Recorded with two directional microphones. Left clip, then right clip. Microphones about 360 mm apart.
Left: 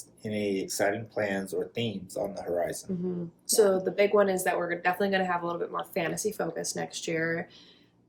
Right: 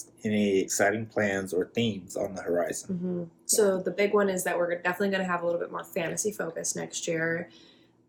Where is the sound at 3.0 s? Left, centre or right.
Centre.